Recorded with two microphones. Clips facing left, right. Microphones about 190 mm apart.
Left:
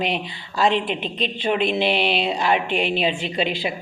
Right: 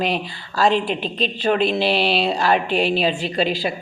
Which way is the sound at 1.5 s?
35° right (ahead or behind).